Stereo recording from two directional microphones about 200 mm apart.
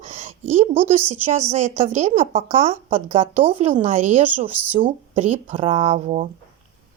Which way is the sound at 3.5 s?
35° right (ahead or behind).